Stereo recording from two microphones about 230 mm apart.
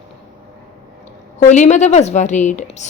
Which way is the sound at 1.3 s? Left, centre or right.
Left.